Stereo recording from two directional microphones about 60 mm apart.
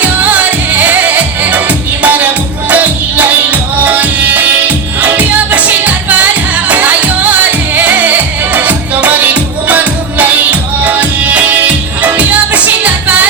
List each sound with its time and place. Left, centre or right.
0.0 s music: right